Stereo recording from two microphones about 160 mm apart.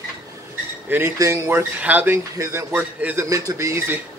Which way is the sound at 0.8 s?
15° right (ahead or behind).